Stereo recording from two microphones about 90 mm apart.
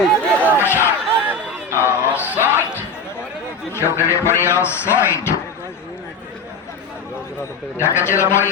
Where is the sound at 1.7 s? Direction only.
30° left (ahead or behind).